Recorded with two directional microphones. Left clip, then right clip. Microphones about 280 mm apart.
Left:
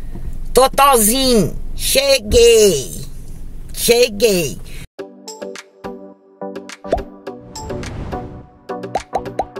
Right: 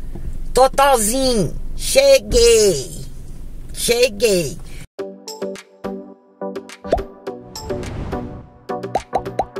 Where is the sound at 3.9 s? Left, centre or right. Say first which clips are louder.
Left 3 dB; centre.